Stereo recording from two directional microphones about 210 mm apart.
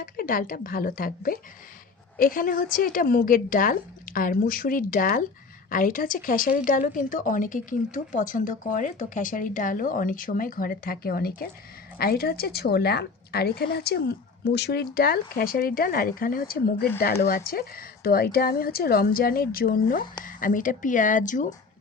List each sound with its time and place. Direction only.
0.0 s a woman's voice: 40° left (ahead or behind)